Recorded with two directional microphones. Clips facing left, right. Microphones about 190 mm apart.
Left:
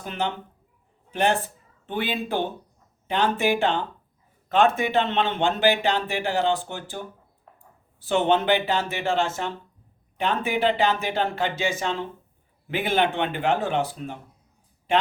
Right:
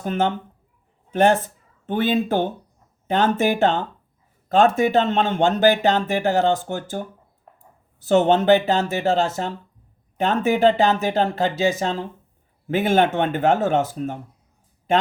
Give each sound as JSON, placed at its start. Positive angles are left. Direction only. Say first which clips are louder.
{"t": 0.0, "sound": "speech", "louder": "right 7 dB", "side_deg": -45}
{"t": 8.0, "sound": "speech", "louder": "right 5 dB", "side_deg": -45}